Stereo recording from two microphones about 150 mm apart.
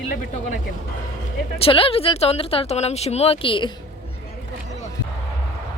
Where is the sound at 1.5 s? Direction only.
40° left (ahead or behind).